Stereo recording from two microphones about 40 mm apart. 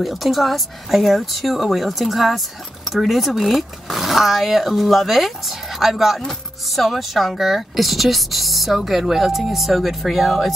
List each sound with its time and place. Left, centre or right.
0.0 s speech: centre